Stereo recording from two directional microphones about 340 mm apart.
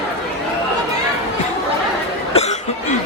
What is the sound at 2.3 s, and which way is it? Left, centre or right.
Cough, centre.